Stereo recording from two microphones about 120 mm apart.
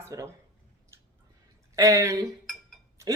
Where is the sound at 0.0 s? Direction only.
25° right (ahead or behind).